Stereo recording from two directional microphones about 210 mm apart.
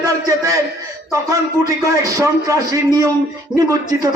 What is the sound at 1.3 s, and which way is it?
A man's voice, 15° right (ahead or behind).